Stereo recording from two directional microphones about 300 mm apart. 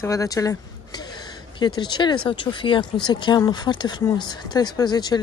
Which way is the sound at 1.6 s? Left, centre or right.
Centre.